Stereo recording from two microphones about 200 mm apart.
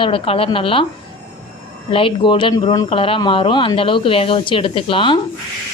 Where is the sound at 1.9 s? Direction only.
25° left (ahead or behind).